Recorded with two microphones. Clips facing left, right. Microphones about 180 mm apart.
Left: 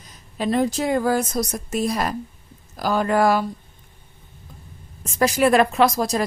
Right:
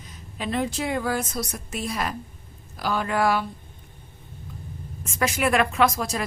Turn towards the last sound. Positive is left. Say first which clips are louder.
# left 4 dB
turn(degrees=35)  # may be behind; listen again after turning